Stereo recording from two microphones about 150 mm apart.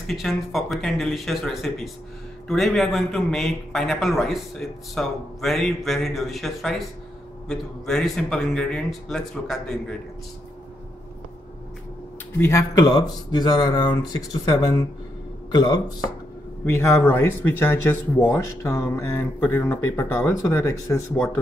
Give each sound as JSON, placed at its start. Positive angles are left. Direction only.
{"t": 0.0, "sound": "a man's voice", "side_deg": 0}
{"t": 12.4, "sound": "a man's voice", "side_deg": 20}
{"t": 15.5, "sound": "a man's voice", "side_deg": 25}
{"t": 16.6, "sound": "speech", "side_deg": 15}